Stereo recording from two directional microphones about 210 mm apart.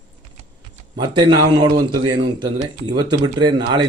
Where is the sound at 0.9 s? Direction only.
20° right (ahead or behind).